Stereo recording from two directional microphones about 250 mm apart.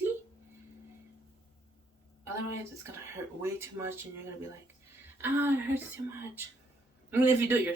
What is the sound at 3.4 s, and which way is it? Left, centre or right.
Speech, centre.